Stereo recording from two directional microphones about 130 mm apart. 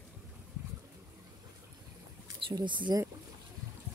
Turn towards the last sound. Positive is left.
turn(degrees=-35)  # may be behind; listen again after turning